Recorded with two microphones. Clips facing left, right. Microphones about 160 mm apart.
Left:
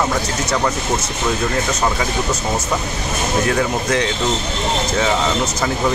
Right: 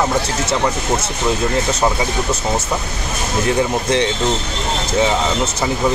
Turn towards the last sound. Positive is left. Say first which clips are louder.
# right 2 dB
turn(degrees=-25)  # may be behind; listen again after turning